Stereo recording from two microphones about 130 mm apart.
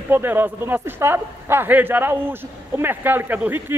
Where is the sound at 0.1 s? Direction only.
15° right (ahead or behind).